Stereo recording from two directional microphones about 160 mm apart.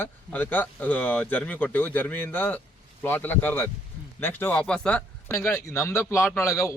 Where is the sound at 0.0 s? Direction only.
10° left (ahead or behind).